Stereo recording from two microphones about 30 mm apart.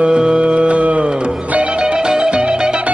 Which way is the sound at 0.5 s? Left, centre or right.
Right.